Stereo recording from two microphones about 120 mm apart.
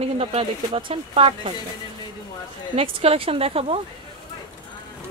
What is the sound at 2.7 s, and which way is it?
Speech, 55° right (ahead or behind).